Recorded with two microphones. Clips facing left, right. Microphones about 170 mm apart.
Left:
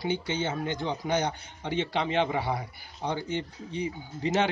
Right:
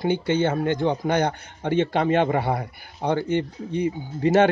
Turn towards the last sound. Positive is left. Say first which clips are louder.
# right 9 dB
turn(degrees=-55)  # may be behind; listen again after turning